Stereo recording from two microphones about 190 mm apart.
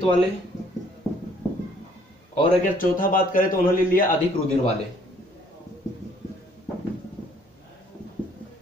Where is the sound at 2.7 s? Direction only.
45° left (ahead or behind).